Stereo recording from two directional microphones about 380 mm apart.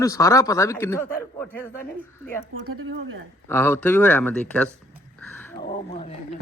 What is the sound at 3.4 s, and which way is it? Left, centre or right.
Speech, centre.